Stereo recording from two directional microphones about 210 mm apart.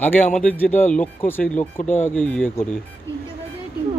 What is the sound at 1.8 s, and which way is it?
Speech, 40° left (ahead or behind).